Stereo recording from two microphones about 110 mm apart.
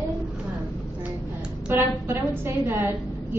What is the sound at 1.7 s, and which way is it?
A woman's voice, 20° right (ahead or behind).